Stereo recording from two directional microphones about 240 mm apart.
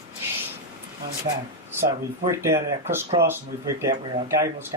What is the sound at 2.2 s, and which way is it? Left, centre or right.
Speech, centre.